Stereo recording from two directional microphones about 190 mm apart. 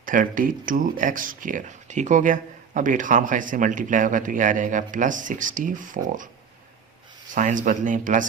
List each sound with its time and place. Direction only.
0.0 s speech: 45° right (ahead or behind)
7.3 s speech: 40° right (ahead or behind)